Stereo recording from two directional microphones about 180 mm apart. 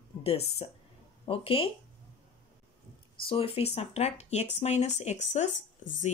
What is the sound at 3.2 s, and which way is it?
Speech, 30° left (ahead or behind).